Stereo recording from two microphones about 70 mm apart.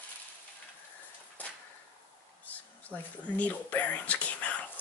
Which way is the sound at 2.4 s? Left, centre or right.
Left.